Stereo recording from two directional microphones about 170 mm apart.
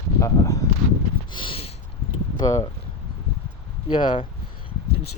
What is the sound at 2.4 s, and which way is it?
Speech, 20° left (ahead or behind).